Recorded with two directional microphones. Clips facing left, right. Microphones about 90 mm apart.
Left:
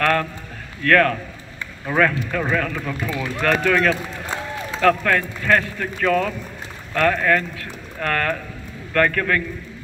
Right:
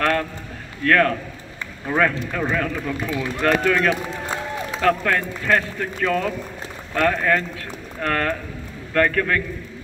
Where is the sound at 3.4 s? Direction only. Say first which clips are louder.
Even; 25° right (ahead or behind).